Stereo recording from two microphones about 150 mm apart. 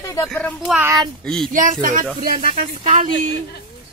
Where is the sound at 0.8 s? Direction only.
25° right (ahead or behind).